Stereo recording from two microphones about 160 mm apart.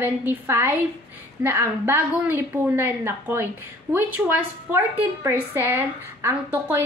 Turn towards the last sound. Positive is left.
turn(degrees=-10)  # may be behind; listen again after turning